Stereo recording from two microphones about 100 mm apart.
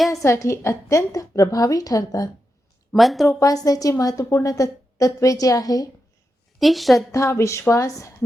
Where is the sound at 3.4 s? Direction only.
35° left (ahead or behind).